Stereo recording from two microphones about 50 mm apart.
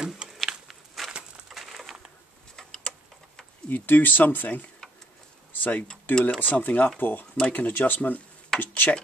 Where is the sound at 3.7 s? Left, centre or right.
Left.